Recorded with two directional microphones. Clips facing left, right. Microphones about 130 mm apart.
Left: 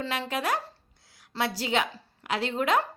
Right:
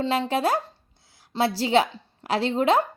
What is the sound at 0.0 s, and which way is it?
A woman's voice, 30° right (ahead or behind).